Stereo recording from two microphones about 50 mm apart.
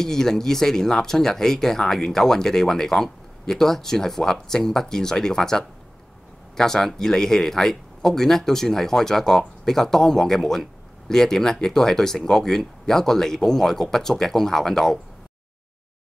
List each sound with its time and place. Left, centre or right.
0.0 s speech: centre